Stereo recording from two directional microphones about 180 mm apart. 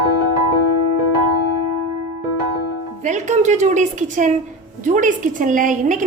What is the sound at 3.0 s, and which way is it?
A woman's voice, 45° right (ahead or behind).